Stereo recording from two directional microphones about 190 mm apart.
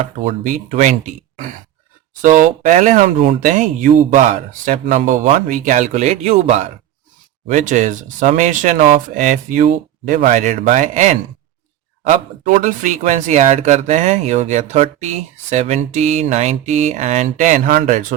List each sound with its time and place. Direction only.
0.3 s speech: 40° right (ahead or behind)